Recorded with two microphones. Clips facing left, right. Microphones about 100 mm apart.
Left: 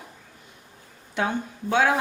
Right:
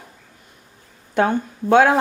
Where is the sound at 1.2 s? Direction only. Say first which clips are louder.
Right 8 dB; 50° right (ahead or behind).